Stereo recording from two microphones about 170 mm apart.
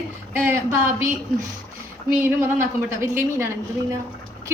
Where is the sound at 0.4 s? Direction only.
15° right (ahead or behind).